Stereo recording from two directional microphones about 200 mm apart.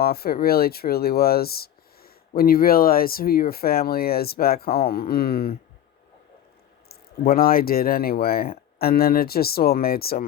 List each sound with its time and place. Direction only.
0.0 s speech: 50° left (ahead or behind)
6.8 s speech: 50° left (ahead or behind)